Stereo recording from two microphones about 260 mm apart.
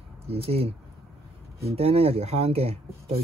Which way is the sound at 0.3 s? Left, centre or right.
Right.